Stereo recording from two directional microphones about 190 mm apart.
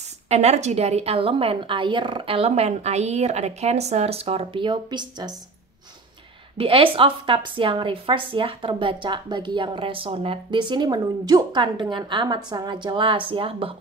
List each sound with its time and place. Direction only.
0.3 s a woman's voice: 35° right (ahead or behind)
6.6 s a woman's voice: 30° right (ahead or behind)